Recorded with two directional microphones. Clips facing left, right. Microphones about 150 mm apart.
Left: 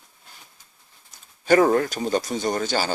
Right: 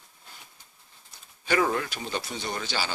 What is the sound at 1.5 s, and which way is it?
Speech, 45° left (ahead or behind).